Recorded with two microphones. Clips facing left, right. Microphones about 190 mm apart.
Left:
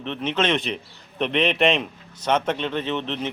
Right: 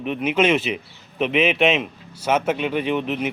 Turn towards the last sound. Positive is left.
turn(degrees=-10)  # may be behind; listen again after turning